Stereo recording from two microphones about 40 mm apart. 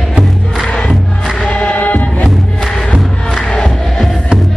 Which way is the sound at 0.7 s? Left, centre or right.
Left.